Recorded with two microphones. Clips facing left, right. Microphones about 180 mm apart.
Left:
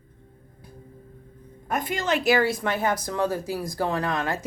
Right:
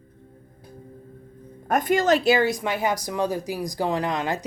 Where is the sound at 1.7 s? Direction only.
45° right (ahead or behind).